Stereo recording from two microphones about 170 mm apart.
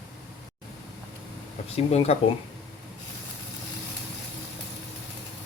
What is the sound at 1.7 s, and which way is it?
Speech, 40° left (ahead or behind).